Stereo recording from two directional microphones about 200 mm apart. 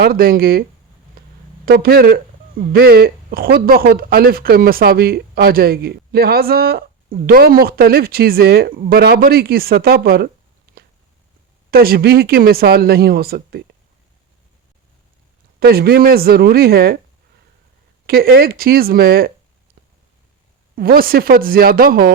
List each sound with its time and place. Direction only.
0.0 s speech: 50° right (ahead or behind)
1.2 s a sound: 50° right (ahead or behind)
1.6 s speech: 50° right (ahead or behind)
11.7 s speech: 50° right (ahead or behind)
15.6 s speech: 50° right (ahead or behind)
18.0 s speech: 50° right (ahead or behind)
20.7 s speech: 45° right (ahead or behind)